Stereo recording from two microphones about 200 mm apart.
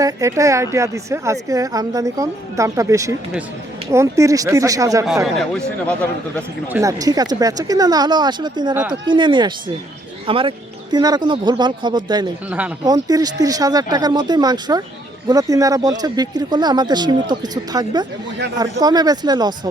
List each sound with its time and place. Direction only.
0.0 s a woman's voice: 15° right (ahead or behind)
5.0 s speech: centre (ahead or behind)
6.7 s speech: 15° right (ahead or behind)
12.5 s a woman's voice: 5° right (ahead or behind)
12.8 s speech: 20° right (ahead or behind)